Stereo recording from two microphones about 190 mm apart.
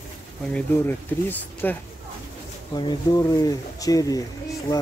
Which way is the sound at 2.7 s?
20° left (ahead or behind).